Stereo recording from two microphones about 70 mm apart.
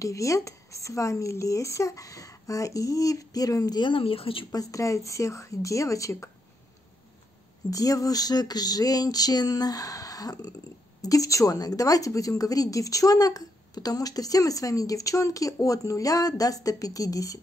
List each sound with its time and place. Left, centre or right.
0.0 s speech: left
4.5 s speech: left
7.7 s a woman's voice: left